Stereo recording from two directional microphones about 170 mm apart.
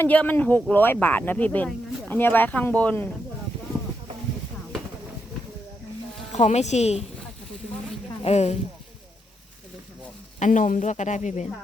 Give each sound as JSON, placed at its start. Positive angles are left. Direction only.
{"t": 0.0, "sound": "speech", "side_deg": 10}
{"t": 6.3, "sound": "a woman's voice", "side_deg": 40}
{"t": 8.2, "sound": "a woman's voice", "side_deg": 40}
{"t": 10.4, "sound": "speech", "side_deg": 50}